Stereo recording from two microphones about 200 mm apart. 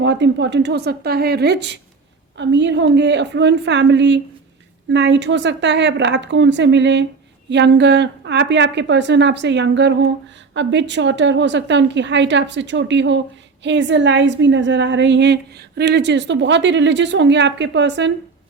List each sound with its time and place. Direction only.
0.0 s a woman's voice: 60° right (ahead or behind)